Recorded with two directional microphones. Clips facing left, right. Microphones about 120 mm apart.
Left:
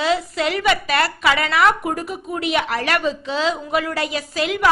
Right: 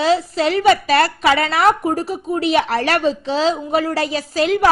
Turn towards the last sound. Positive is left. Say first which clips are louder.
# right 5 dB
turn(degrees=-35)  # may be behind; listen again after turning